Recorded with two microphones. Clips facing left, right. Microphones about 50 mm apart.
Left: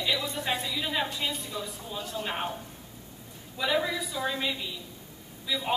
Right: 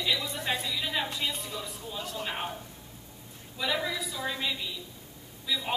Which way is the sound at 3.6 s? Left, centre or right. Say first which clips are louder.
Left 3 dB; centre.